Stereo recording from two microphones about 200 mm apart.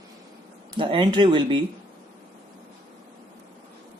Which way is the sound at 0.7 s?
25° right (ahead or behind).